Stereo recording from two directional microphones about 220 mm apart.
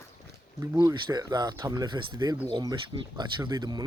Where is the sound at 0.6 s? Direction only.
15° right (ahead or behind).